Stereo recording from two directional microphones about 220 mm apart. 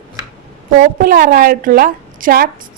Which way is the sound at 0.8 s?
40° right (ahead or behind).